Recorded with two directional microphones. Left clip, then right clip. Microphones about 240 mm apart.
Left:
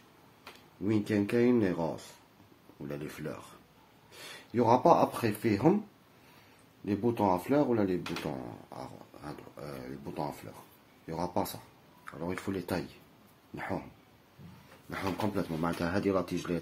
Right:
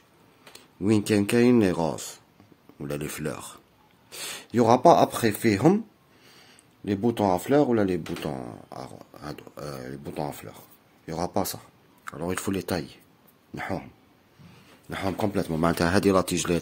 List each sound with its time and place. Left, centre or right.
0.8 s speech: right
4.5 s speech: right
6.8 s speech: right
14.9 s speech: right